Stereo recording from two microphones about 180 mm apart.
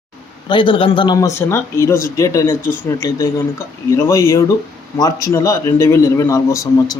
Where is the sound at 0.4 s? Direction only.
25° left (ahead or behind).